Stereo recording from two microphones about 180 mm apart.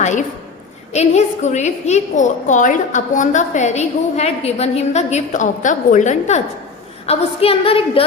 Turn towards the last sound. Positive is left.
turn(degrees=30)  # may be behind; listen again after turning